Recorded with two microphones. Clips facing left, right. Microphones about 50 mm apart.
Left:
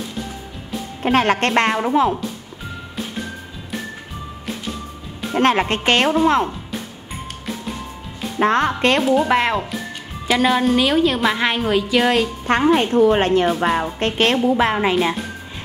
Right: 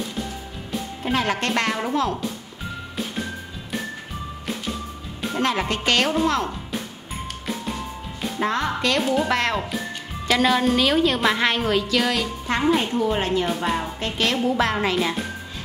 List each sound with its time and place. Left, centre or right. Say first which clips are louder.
1.0 s speech: left 7 dB; left
1.5 s speech: left 6 dB; left
1.8 s a woman's voice: left 6 dB; centre
5.4 s a woman's voice: left 6 dB; left
8.4 s a woman's voice: left 7 dB; left
9.0 s speech: left 5 dB; centre
9.3 s a woman's voice: left 4 dB; centre
12.1 s a woman's voice: left 6 dB; left
14.5 s speech: left 4 dB; centre